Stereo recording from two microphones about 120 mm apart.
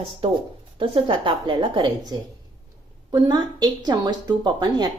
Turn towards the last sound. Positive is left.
turn(degrees=-40)  # may be behind; listen again after turning